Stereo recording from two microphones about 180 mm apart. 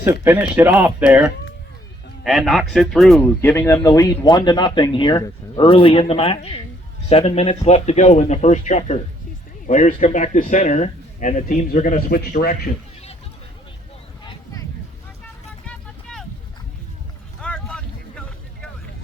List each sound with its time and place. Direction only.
0.0 s speech: 10° right (ahead or behind); by 12.7 s 50° left (ahead or behind)
15.6 s vehicle: 5° left (ahead or behind)
17.4 s boat: 5° left (ahead or behind)